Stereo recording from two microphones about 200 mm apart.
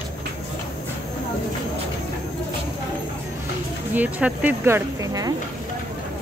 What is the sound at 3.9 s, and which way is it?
Speech, 5° right (ahead or behind).